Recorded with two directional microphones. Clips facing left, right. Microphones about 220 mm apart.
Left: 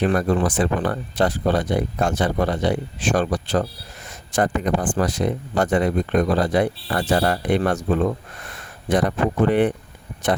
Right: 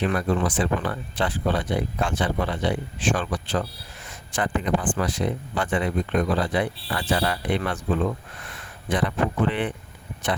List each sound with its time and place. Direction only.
0.0 s speech: 45° left (ahead or behind)